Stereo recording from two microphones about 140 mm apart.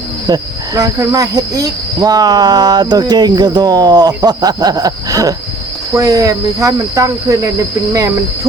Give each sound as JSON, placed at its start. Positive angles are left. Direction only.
{"t": 0.3, "sound": "cricket", "side_deg": -25}